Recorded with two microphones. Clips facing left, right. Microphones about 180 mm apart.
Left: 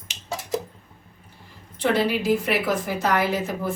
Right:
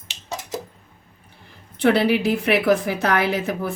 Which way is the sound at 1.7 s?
65° right (ahead or behind).